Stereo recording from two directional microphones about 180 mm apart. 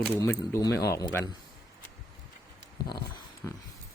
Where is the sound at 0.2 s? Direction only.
15° left (ahead or behind).